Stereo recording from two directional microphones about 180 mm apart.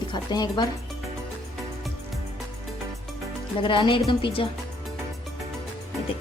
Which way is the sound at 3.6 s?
30° left (ahead or behind).